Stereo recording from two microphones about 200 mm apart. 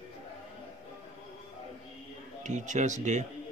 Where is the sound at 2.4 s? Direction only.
35° right (ahead or behind).